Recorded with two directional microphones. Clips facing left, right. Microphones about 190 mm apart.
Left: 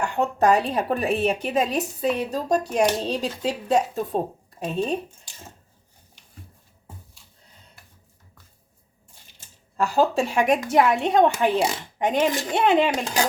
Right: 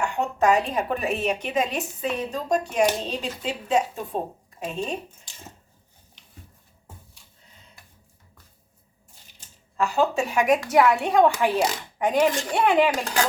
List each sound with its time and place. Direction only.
0.3 s a woman's voice: 35° left (ahead or behind)
9.7 s a woman's voice: 35° left (ahead or behind)